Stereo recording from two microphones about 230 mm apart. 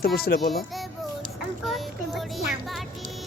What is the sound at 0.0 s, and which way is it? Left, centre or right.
Speech, left.